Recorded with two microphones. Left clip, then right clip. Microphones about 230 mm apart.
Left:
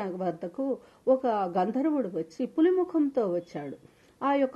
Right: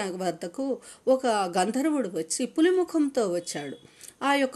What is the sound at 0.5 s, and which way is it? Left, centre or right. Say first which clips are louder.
A woman's voice: right 1 dB; right.